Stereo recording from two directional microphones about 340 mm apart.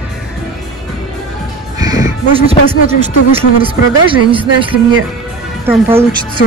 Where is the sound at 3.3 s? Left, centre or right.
Centre.